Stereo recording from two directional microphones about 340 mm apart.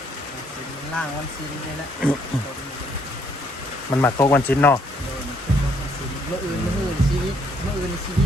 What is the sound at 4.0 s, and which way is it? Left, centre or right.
Speech, centre.